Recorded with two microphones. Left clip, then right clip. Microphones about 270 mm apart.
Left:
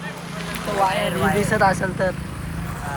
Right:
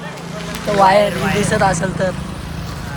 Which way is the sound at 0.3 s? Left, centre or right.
Centre.